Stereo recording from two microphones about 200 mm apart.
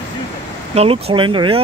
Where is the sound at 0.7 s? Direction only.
30° right (ahead or behind).